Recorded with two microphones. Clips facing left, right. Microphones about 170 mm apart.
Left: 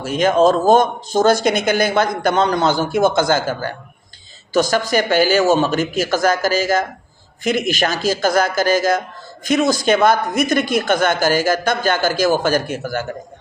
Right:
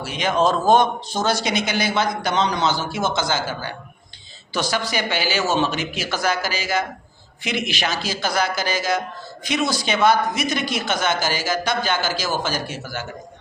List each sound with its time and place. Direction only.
0.0 s speech: 45° left (ahead or behind)